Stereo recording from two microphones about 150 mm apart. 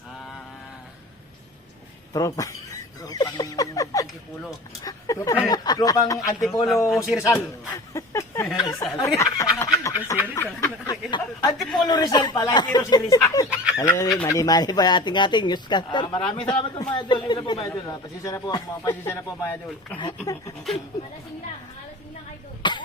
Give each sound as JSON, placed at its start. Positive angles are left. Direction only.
{"t": 2.1, "sound": "speech", "side_deg": 25}
{"t": 6.4, "sound": "speech", "side_deg": 0}
{"t": 7.9, "sound": "a sound", "side_deg": 20}
{"t": 8.5, "sound": "a woman's voice", "side_deg": 25}
{"t": 11.5, "sound": "speech", "side_deg": 0}
{"t": 11.9, "sound": "speech", "side_deg": 25}
{"t": 17.7, "sound": "speech", "side_deg": 20}
{"t": 20.0, "sound": "speech", "side_deg": 25}
{"t": 22.6, "sound": "cough", "side_deg": 30}